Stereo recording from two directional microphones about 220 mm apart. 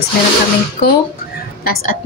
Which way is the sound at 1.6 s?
40° left (ahead or behind).